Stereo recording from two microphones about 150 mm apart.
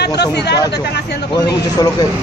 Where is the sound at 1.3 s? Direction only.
25° left (ahead or behind).